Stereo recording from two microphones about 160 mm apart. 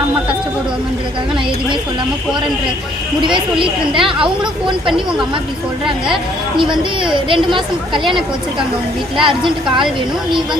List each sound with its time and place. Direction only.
3.6 s a woman's voice: 35° right (ahead or behind)
4.9 s speech: 5° right (ahead or behind)
6.6 s a woman's voice: 30° right (ahead or behind)
9.2 s a woman's voice: 30° right (ahead or behind)